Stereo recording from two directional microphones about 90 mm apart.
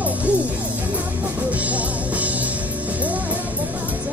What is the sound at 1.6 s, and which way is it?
Music, 15° right (ahead or behind).